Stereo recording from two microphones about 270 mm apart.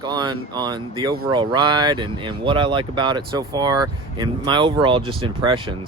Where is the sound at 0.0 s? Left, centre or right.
Centre.